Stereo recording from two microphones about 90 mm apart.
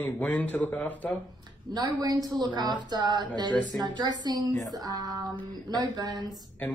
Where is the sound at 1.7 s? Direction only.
45° right (ahead or behind).